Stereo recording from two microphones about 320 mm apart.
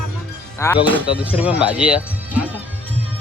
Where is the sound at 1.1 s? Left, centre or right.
Centre.